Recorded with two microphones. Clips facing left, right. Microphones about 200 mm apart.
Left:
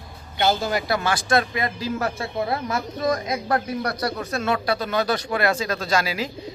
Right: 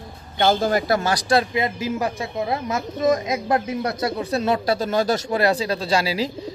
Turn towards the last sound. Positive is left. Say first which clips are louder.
# right 2 dB
turn(degrees=-30)  # may be behind; listen again after turning